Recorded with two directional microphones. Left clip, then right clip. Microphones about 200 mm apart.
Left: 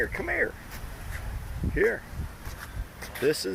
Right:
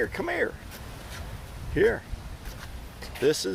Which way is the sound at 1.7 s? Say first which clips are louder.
Right 2 dB; 20° right (ahead or behind).